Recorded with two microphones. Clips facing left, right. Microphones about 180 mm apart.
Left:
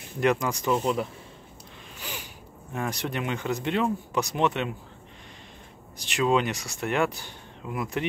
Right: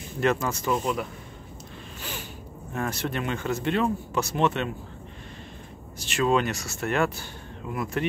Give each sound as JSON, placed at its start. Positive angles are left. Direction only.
{"t": 0.2, "sound": "speech", "side_deg": 15}
{"t": 2.0, "sound": "a sound", "side_deg": 15}
{"t": 2.7, "sound": "speech", "side_deg": 15}
{"t": 5.9, "sound": "speech", "side_deg": 15}